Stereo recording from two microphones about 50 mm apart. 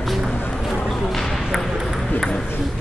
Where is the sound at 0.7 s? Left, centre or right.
Centre.